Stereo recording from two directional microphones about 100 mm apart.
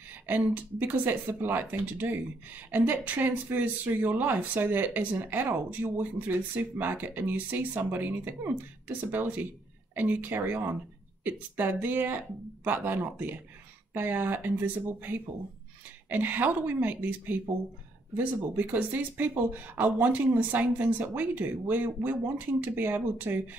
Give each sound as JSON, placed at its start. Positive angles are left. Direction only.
{"t": 0.7, "sound": "speech", "side_deg": -20}